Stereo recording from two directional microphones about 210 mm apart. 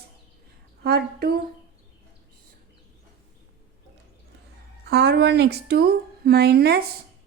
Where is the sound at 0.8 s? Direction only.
50° right (ahead or behind).